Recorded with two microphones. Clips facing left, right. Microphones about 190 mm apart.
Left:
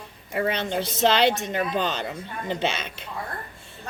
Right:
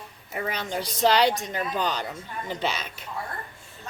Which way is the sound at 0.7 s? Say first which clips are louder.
Right 1 dB; 25° left (ahead or behind).